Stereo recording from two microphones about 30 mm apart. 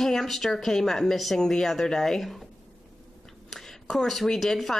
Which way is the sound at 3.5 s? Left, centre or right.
Centre.